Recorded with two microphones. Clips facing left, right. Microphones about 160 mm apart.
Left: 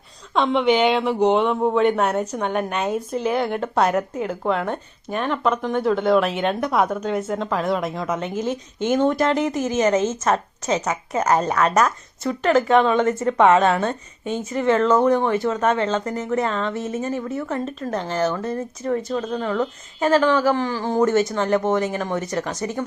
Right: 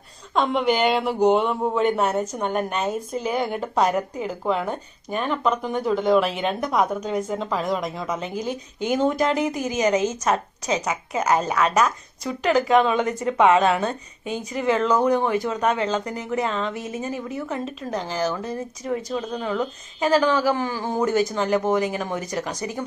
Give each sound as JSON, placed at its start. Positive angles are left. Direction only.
{"t": 0.3, "sound": "speech", "side_deg": -5}
{"t": 11.7, "sound": "a woman's voice", "side_deg": -10}